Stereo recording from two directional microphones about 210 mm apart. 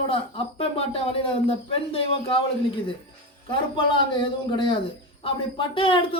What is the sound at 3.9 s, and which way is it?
A man's voice, 20° left (ahead or behind).